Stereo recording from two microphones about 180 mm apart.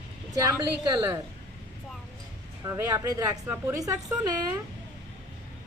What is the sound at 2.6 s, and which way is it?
A woman's voice, 15° right (ahead or behind).